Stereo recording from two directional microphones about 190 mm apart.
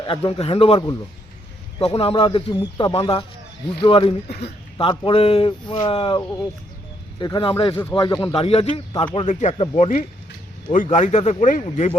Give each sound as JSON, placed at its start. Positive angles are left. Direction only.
{"t": 0.0, "sound": "speech", "side_deg": 30}
{"t": 7.8, "sound": "speech", "side_deg": 10}
{"t": 8.0, "sound": "speech", "side_deg": 20}
{"t": 8.4, "sound": "speech", "side_deg": 30}
{"t": 11.6, "sound": "speech", "side_deg": 30}